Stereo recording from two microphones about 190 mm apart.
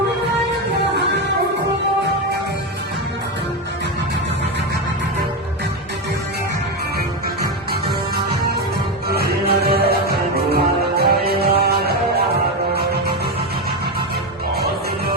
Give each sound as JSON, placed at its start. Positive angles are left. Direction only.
{"t": 7.7, "sound": "music", "side_deg": -55}
{"t": 14.5, "sound": "music", "side_deg": -55}